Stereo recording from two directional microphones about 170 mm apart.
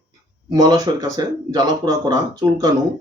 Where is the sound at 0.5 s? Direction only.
20° right (ahead or behind).